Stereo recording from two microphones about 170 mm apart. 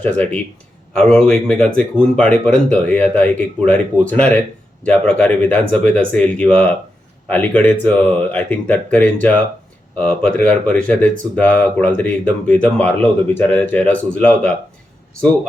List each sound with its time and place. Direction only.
0.0 s speech: 10° left (ahead or behind)